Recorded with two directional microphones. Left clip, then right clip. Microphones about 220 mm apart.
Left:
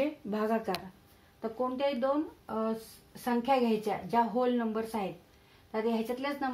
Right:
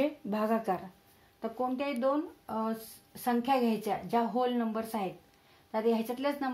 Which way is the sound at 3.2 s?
35° right (ahead or behind).